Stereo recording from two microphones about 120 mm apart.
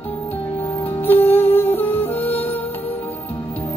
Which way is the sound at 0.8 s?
15° left (ahead or behind).